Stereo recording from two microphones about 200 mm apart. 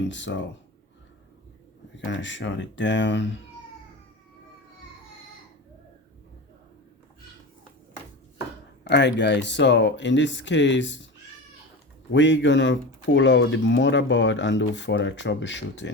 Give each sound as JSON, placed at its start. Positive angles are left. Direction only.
{"t": 0.1, "sound": "speech", "side_deg": 65}
{"t": 2.0, "sound": "speech", "side_deg": 65}
{"t": 8.8, "sound": "speech", "side_deg": 60}
{"t": 12.1, "sound": "speech", "side_deg": 65}